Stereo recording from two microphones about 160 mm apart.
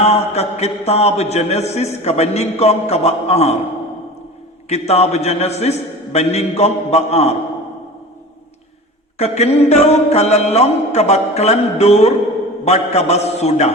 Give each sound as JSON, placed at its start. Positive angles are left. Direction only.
{"t": 0.0, "sound": "mantra", "side_deg": 40}
{"t": 4.7, "sound": "mantra", "side_deg": 40}
{"t": 9.1, "sound": "mantra", "side_deg": 40}
{"t": 12.6, "sound": "a man's voice", "side_deg": 40}